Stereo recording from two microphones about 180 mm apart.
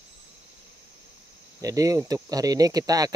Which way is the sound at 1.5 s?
20° right (ahead or behind).